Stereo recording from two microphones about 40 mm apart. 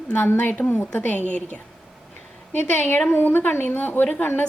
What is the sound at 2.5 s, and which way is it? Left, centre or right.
A woman's voice, left.